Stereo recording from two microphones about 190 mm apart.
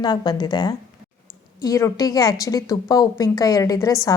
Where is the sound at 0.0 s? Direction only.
20° left (ahead or behind).